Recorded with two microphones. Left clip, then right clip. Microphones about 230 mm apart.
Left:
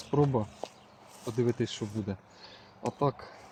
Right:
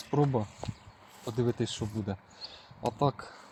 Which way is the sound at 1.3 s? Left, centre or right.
Right.